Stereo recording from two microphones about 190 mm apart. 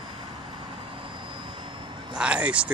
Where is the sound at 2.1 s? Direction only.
5° right (ahead or behind).